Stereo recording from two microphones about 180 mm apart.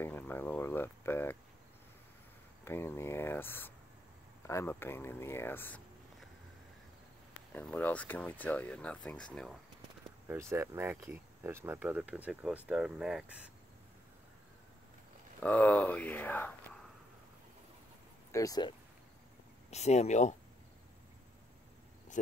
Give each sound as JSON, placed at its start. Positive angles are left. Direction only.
{"t": 0.0, "sound": "speech", "side_deg": 10}
{"t": 2.6, "sound": "speech", "side_deg": 15}
{"t": 7.5, "sound": "speech", "side_deg": 10}
{"t": 10.2, "sound": "speech", "side_deg": -15}
{"t": 15.4, "sound": "speech", "side_deg": 10}
{"t": 18.3, "sound": "speech", "side_deg": 20}
{"t": 19.7, "sound": "speech", "side_deg": 35}